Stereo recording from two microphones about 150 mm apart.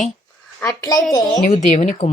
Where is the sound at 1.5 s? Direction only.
50° left (ahead or behind).